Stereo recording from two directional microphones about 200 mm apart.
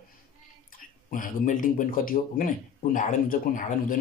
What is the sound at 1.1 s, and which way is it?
A man's voice, 40° left (ahead or behind).